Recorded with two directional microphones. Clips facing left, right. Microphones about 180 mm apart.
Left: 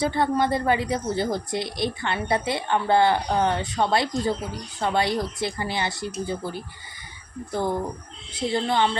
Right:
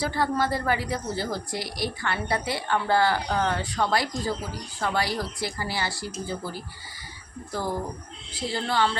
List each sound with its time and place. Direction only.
0.0 s a woman's voice: 20° left (ahead or behind)
8.3 s a woman's voice: 20° left (ahead or behind)